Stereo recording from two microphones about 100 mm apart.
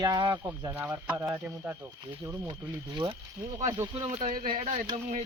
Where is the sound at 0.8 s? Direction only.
20° right (ahead or behind).